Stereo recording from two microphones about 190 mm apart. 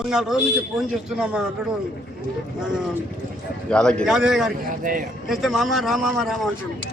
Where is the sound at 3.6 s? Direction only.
5° left (ahead or behind).